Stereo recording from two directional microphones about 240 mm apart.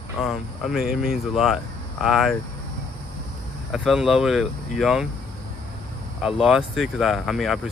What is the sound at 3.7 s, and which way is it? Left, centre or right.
Speech, centre.